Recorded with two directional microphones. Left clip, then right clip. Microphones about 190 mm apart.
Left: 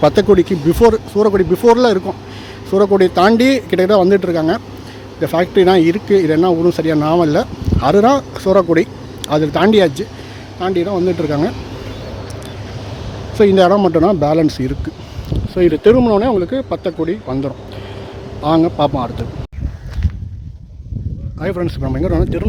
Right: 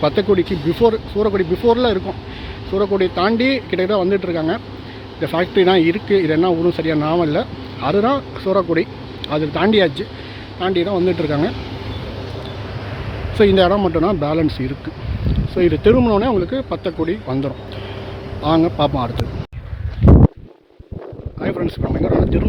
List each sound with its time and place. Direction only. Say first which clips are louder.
0.0 s speech: left 5 dB; 30° left (ahead or behind); by 11.5 s 10° left (ahead or behind)
13.3 s speech: left 3 dB; 10° left (ahead or behind)
21.4 s speech: left 2 dB; 25° left (ahead or behind)